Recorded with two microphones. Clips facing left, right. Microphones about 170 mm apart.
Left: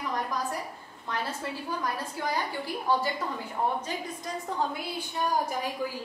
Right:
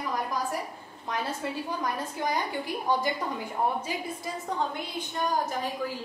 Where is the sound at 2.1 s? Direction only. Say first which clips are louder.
Right 1 dB; 15° right (ahead or behind).